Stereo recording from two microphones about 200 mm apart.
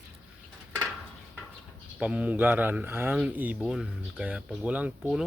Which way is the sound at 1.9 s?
5° right (ahead or behind).